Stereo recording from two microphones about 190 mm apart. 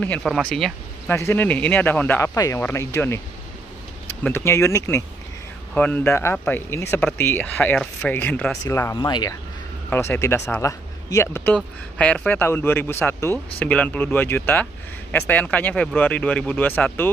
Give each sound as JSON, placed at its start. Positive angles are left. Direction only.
{"t": 0.0, "sound": "speech", "side_deg": 5}
{"t": 4.2, "sound": "speech", "side_deg": 15}